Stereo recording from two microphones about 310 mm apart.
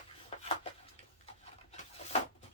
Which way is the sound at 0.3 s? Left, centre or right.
Centre.